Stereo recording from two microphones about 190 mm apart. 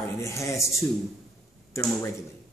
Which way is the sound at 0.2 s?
15° left (ahead or behind).